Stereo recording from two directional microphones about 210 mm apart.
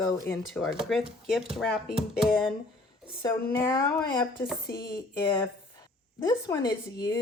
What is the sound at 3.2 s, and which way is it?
A woman's voice, 15° left (ahead or behind).